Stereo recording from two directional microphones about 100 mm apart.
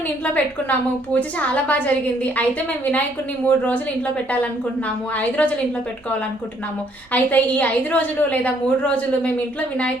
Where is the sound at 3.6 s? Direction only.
15° left (ahead or behind).